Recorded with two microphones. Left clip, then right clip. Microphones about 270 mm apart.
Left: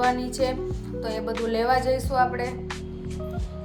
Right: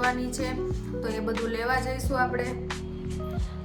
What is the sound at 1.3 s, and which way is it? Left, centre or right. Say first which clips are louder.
Speech: left 7 dB; centre.